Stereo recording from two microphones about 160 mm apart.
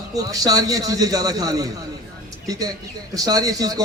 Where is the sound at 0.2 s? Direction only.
20° right (ahead or behind).